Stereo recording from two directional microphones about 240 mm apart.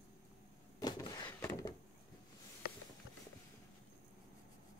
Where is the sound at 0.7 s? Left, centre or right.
Centre.